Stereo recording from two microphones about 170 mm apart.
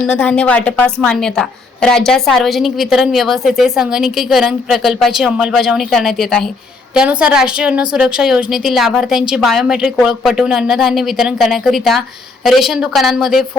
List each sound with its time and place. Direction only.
0.0 s a woman's voice: 5° left (ahead or behind)